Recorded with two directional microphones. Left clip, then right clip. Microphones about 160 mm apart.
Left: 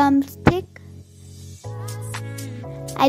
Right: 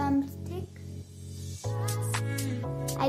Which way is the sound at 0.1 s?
55° left (ahead or behind).